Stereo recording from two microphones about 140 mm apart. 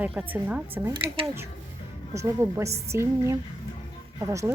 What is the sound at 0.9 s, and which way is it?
Speech, 40° right (ahead or behind).